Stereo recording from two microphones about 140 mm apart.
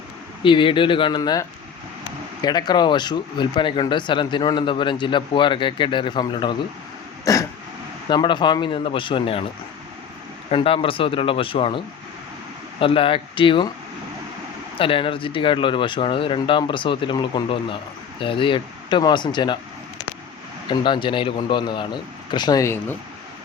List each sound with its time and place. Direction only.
0.4 s speech: 35° left (ahead or behind)
7.3 s throat clearing: 25° left (ahead or behind)
8.1 s speech: 35° left (ahead or behind)
10.5 s speech: 40° left (ahead or behind)
12.8 s speech: 40° left (ahead or behind)
14.8 s speech: 40° left (ahead or behind)
20.7 s speech: 35° left (ahead or behind); by 23.0 s 20° left (ahead or behind)